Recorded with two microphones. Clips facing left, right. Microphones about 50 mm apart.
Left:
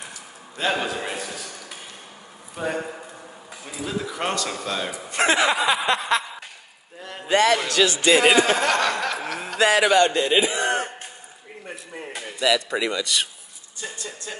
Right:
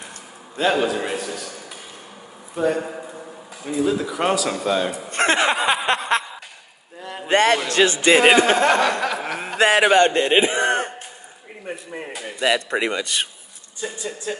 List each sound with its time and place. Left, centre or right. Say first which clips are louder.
0.6 s a man's voice: right 5 dB; centre
2.5 s a man's voice: right 6 dB; centre
5.1 s speech: right 1 dB; right
7.0 s a sound: right 4 dB; centre
7.2 s a man's voice: right 2 dB; right
7.5 s a man's voice: right 2 dB; right
8.6 s a woman's voice: right 4 dB; centre
9.0 s chuckle: right 3 dB; centre
9.6 s a man's voice: right 2 dB; right
11.6 s speech: right 5 dB; centre
12.4 s a man's voice: right 1 dB; right
13.7 s a woman's voice: right 5 dB; centre